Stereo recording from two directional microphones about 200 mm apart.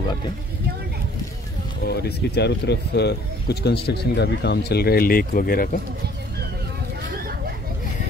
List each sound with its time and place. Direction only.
1.9 s speech: 55° left (ahead or behind)